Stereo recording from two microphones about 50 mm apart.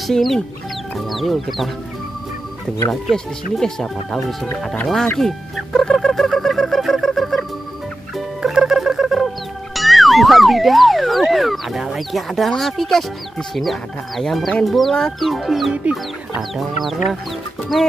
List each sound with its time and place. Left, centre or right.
0.1 s speech: centre
2.9 s speech: centre
5.9 s fowl: centre
8.5 s music: centre
9.8 s speech: centre
15.7 s chicken: right
16.3 s speech: centre